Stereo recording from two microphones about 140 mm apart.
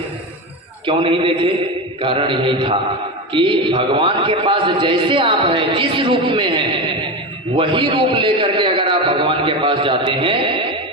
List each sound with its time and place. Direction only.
0.9 s a man's voice: 40° right (ahead or behind)